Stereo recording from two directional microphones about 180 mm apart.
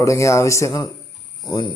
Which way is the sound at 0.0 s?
15° left (ahead or behind).